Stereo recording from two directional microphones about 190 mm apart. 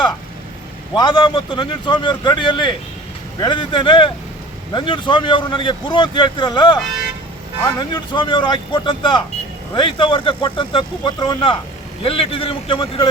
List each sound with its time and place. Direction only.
0.9 s speech: 25° left (ahead or behind)